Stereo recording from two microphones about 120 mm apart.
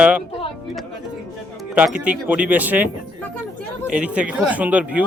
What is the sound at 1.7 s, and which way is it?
Speech, 10° right (ahead or behind).